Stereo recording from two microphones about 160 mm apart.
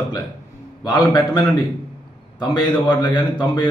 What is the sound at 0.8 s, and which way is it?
A man's voice, 25° left (ahead or behind).